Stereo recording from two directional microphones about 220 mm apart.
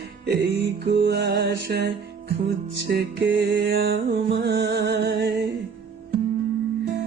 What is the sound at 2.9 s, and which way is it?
Music, 55° right (ahead or behind).